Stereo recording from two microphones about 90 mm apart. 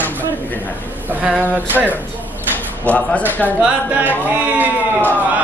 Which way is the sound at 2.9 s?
15° left (ahead or behind).